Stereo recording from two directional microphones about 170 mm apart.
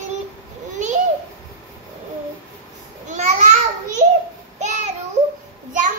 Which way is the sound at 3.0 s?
45° right (ahead or behind).